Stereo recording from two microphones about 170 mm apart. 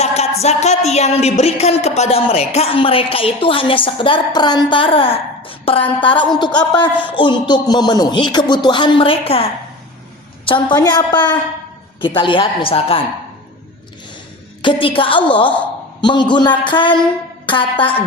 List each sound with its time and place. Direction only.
0.0 s music: 40° left (ahead or behind)
6.4 s a man's voice: 25° left (ahead or behind)
14.6 s music: 30° left (ahead or behind)
16.0 s a man's voice: 25° left (ahead or behind)